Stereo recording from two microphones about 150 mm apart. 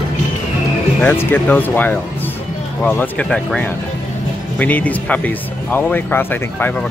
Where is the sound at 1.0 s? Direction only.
15° left (ahead or behind).